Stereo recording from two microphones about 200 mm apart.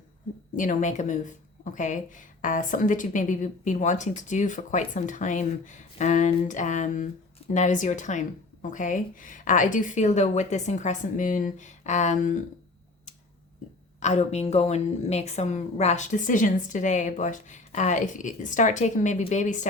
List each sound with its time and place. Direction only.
0.5 s speech: 40° left (ahead or behind)
14.0 s speech: 35° left (ahead or behind)